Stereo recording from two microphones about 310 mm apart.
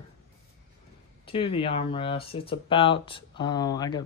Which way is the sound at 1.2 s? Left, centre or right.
Centre.